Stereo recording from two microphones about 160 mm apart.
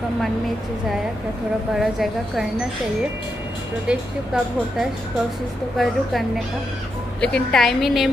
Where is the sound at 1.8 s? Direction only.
Centre (ahead or behind).